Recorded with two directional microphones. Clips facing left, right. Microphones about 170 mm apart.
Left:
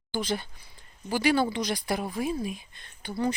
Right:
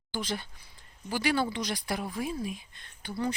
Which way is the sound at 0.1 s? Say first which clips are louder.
Left 4 dB; 20° left (ahead or behind).